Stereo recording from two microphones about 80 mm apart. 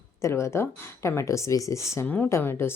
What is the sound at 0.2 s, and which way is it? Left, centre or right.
Speech, left.